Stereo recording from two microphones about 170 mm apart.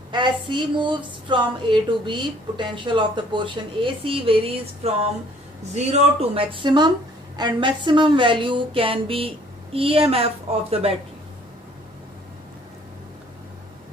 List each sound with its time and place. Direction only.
0.1 s a woman's voice: 25° right (ahead or behind)